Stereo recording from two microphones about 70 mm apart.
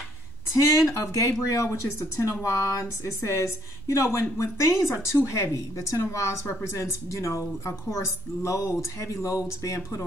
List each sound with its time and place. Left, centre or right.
0.6 s speech: left